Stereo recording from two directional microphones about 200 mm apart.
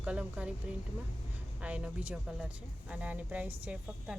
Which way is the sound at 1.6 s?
5° right (ahead or behind).